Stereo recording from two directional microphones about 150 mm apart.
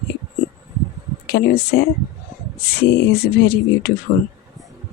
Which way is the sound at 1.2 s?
90° left.